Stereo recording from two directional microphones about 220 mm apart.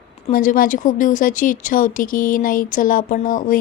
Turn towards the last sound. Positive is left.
turn(degrees=40)  # may be behind; listen again after turning